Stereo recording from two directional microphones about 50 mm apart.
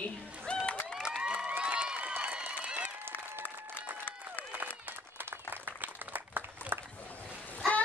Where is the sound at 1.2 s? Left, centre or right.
Right.